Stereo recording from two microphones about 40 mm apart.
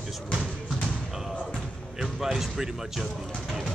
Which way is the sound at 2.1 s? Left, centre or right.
Centre.